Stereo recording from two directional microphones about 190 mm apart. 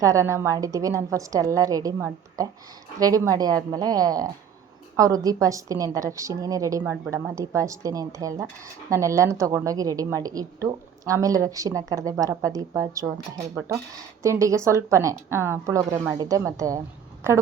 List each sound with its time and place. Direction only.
0.0 s a woman's voice: 15° right (ahead or behind)